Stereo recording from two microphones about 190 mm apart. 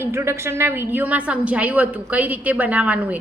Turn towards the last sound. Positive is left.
turn(degrees=-5)  # may be behind; listen again after turning